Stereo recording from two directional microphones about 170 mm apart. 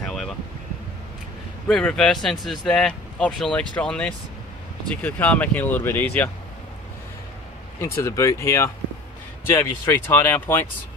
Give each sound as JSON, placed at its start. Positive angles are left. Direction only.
{"t": 0.0, "sound": "a sound", "side_deg": 0}
{"t": 1.7, "sound": "speech", "side_deg": 5}
{"t": 7.8, "sound": "speech", "side_deg": 15}